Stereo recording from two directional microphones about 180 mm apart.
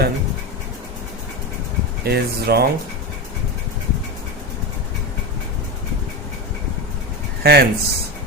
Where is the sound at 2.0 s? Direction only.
60° right (ahead or behind).